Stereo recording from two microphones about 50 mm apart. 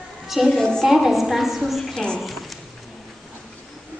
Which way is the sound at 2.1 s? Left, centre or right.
Centre.